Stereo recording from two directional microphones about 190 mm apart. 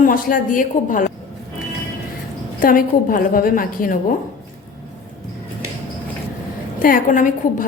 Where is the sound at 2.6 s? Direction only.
45° left (ahead or behind).